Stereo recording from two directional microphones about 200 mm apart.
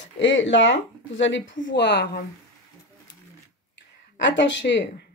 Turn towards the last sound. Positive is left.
turn(degrees=60)  # may be behind; listen again after turning